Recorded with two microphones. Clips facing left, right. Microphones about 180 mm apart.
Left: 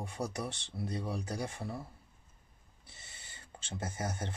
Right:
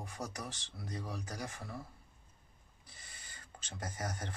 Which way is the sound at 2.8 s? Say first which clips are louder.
Left 1 dB; 25° left (ahead or behind).